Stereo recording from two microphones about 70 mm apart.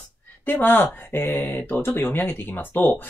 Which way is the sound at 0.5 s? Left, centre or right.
Left.